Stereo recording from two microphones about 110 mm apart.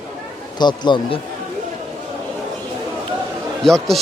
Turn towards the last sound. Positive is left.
turn(degrees=5)  # may be behind; listen again after turning